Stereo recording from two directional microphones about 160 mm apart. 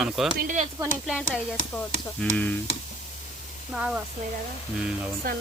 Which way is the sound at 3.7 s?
5° right (ahead or behind).